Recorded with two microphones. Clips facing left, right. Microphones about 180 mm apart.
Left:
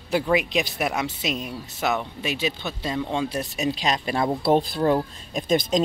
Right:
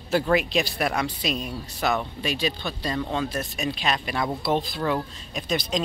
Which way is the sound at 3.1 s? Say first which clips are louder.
Left 1 dB; 20° left (ahead or behind).